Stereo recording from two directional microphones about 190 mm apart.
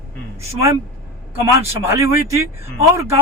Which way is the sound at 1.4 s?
15° right (ahead or behind).